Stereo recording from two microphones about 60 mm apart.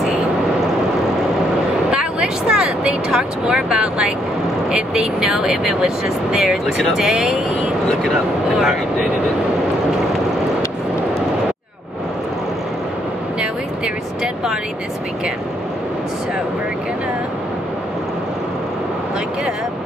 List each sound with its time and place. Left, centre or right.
1.9 s vehicle: centre
3.2 s speech: centre
14.2 s speech: centre